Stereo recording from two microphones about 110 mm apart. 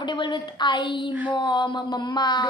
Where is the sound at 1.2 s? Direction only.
45° left (ahead or behind).